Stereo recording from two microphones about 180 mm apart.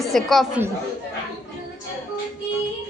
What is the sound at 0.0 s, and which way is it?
Speech, centre (ahead or behind).